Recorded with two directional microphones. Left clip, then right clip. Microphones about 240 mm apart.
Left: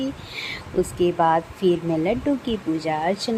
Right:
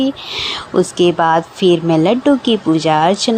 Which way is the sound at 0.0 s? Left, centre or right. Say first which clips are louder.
Right 11 dB; right.